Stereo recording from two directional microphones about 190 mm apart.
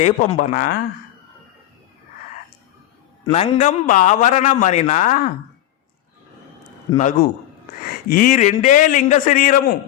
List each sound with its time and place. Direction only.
0.0 s speech: 40° left (ahead or behind)
3.3 s a man's voice: 35° left (ahead or behind)
6.9 s a man's voice: 40° left (ahead or behind)